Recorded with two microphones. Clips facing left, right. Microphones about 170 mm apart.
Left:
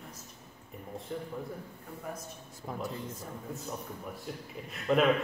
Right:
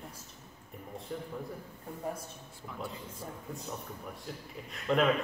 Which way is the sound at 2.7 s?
40° left (ahead or behind).